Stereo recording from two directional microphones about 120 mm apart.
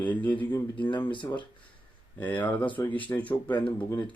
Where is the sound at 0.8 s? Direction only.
40° left (ahead or behind).